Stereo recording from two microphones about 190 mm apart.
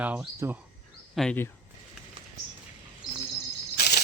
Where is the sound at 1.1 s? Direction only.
5° left (ahead or behind).